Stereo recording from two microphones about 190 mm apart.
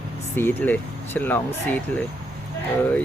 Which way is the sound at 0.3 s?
10° left (ahead or behind).